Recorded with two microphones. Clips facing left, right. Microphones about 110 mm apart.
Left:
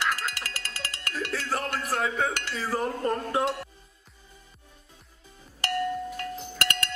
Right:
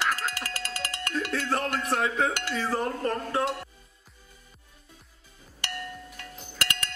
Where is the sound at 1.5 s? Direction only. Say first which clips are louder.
Right 2 dB; centre (ahead or behind).